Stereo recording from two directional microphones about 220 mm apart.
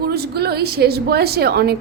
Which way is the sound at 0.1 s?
45° right (ahead or behind).